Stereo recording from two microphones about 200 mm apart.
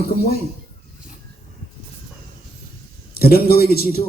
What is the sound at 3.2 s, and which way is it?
Speech, 50° left (ahead or behind).